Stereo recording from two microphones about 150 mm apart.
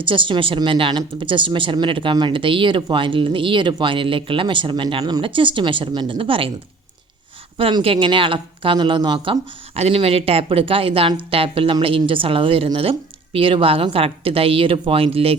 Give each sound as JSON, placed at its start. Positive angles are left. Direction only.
{"t": 0.0, "sound": "speech", "side_deg": -35}
{"t": 7.5, "sound": "speech", "side_deg": -35}